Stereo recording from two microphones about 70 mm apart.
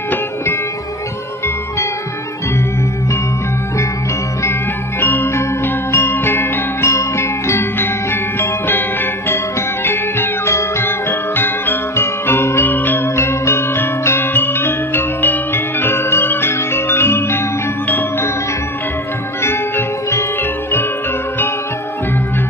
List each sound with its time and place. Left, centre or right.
4.9 s music: left
13.1 s music: left
19.4 s music: left